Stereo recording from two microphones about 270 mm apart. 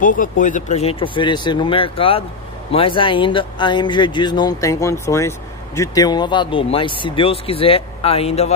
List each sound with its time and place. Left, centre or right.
0.0 s speech: left